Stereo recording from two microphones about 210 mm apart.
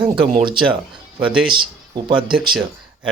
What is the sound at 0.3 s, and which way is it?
Speech, 25° right (ahead or behind).